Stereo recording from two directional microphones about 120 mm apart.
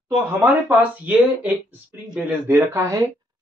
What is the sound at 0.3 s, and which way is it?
Speech, 15° right (ahead or behind).